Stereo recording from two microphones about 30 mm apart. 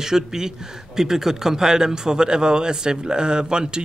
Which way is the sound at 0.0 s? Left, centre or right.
Centre.